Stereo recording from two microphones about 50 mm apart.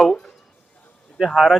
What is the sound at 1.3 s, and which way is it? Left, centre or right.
Speech, centre.